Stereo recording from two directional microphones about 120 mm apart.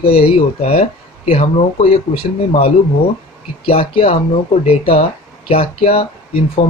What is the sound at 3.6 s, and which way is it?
Speech, 50° left (ahead or behind).